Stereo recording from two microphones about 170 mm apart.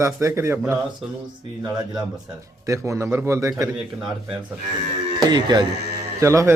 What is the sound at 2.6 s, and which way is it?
Speech, 15° right (ahead or behind).